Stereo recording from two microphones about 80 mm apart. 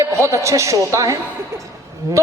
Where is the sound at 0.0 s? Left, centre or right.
Right.